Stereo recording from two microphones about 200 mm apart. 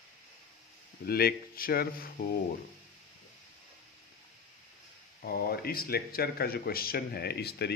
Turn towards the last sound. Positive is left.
turn(degrees=55)  # may be behind; listen again after turning